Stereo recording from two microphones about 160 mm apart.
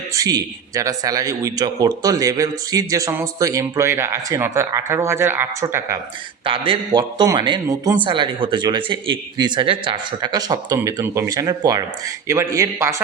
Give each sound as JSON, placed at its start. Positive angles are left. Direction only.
{"t": 0.1, "sound": "a man's voice", "side_deg": -20}
{"t": 6.4, "sound": "a man's voice", "side_deg": -30}